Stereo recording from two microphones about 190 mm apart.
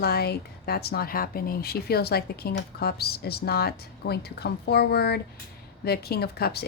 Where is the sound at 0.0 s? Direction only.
55° left (ahead or behind).